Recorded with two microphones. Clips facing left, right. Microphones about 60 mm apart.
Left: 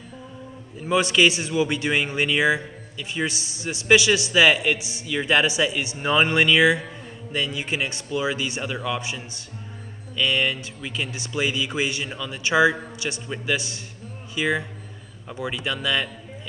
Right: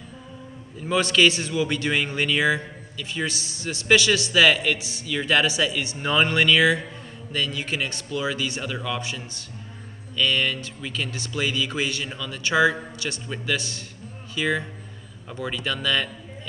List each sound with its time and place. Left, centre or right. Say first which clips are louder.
0.8 s a man's voice: left 1 dB; centre